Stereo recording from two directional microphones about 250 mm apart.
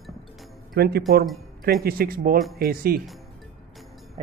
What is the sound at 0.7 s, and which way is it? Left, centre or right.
Speech, right.